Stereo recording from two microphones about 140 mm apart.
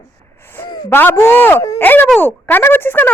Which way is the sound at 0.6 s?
30° left (ahead or behind).